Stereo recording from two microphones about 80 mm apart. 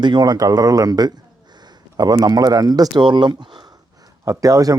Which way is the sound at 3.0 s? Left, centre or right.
Right.